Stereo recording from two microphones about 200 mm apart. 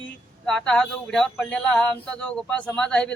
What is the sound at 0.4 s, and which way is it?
Speech, centre (ahead or behind).